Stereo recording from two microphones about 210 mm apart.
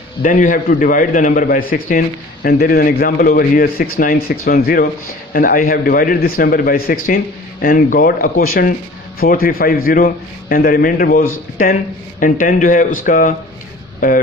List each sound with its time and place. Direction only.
0.2 s a man's voice: 40° left (ahead or behind)